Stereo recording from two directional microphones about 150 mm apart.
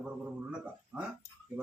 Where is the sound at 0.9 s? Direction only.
Centre (ahead or behind).